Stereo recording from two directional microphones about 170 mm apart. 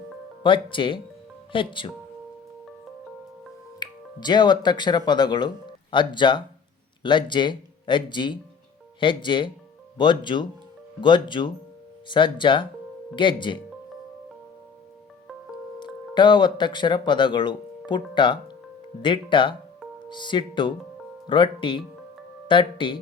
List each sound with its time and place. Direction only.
0.4 s speech: 30° left (ahead or behind)
3.8 s speech: 25° left (ahead or behind)
15.8 s speech: 30° left (ahead or behind)